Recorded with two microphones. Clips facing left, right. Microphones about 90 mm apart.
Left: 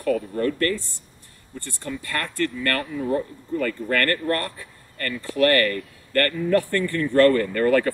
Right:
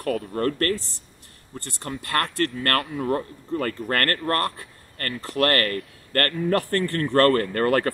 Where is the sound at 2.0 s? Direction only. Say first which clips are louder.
Right 3 dB; 65° right (ahead or behind).